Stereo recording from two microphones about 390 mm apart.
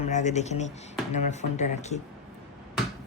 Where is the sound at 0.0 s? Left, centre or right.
Centre.